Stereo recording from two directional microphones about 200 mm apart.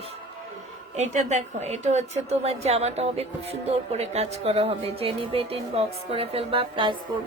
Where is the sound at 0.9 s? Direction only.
35° right (ahead or behind).